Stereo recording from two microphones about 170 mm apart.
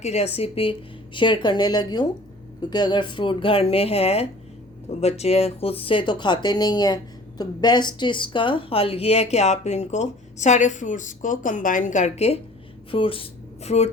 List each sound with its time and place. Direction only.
0.0 s a woman's voice: 40° left (ahead or behind)